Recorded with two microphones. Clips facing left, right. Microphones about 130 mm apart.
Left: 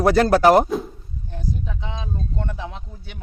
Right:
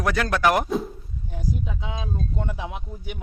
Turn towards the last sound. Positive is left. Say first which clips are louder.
# right 2 dB
turn(degrees=-15)  # may be behind; listen again after turning